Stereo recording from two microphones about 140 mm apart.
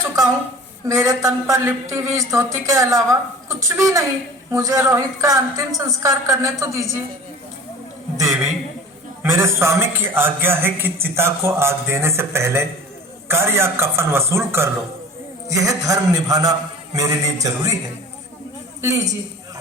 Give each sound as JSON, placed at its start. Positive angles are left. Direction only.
{"t": 0.0, "sound": "a sound", "side_deg": -20}
{"t": 0.9, "sound": "speech", "side_deg": -20}
{"t": 9.3, "sound": "a man's voice", "side_deg": -20}